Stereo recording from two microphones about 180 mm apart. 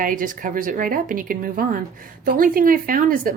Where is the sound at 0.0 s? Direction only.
50° right (ahead or behind).